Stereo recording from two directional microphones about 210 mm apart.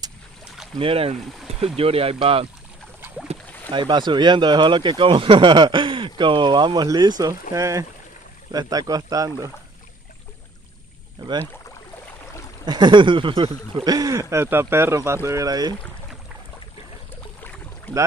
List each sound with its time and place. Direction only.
0.7 s speech: 25° right (ahead or behind)
3.7 s speech: 20° right (ahead or behind)
11.2 s speech: 20° right (ahead or behind)
12.6 s speech: 20° right (ahead or behind)